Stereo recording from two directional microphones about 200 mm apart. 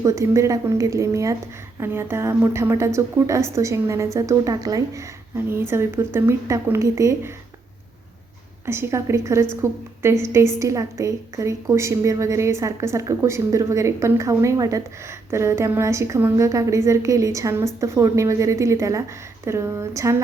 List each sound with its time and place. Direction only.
0.0 s a woman's voice: 15° right (ahead or behind)
8.6 s a woman's voice: 10° right (ahead or behind)